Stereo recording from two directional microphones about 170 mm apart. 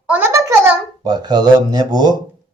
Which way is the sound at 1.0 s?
25° right (ahead or behind).